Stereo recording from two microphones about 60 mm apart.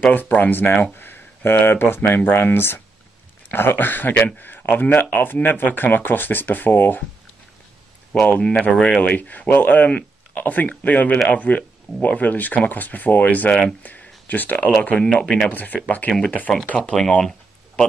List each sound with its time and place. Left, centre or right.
0.1 s speech: left
8.1 s speech: left
15.5 s speech: left
16.8 s speech: centre
17.2 s a sound: centre